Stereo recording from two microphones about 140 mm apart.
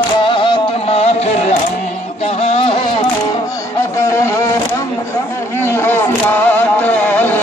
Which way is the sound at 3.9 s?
20° left (ahead or behind).